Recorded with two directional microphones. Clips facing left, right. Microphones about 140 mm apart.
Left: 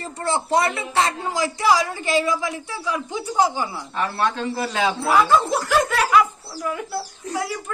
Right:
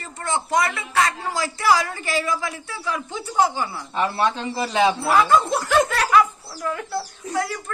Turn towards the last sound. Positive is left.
turn(degrees=10)  # may be behind; listen again after turning